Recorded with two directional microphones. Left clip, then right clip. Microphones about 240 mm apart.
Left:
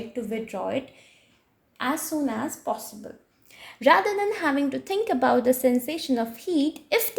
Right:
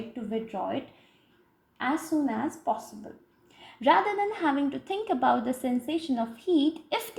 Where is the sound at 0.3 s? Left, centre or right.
Left.